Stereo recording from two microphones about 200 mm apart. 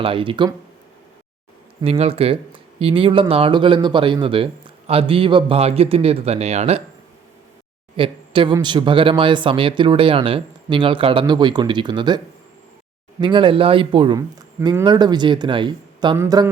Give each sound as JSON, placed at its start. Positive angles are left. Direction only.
{"t": 0.0, "sound": "speech", "side_deg": -25}
{"t": 1.8, "sound": "speech", "side_deg": -30}
{"t": 7.9, "sound": "speech", "side_deg": -25}
{"t": 16.1, "sound": "a sound", "side_deg": -15}